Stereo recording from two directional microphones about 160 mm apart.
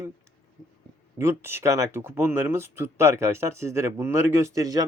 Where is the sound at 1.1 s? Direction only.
15° right (ahead or behind).